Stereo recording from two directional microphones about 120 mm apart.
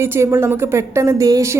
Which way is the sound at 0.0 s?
20° right (ahead or behind).